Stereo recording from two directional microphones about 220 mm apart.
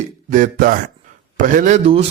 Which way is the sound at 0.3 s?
35° right (ahead or behind).